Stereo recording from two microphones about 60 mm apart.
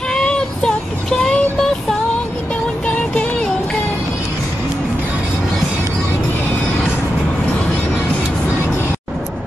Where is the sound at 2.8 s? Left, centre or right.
Centre.